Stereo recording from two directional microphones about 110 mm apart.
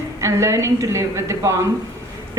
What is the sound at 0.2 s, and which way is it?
A woman's voice, 25° right (ahead or behind).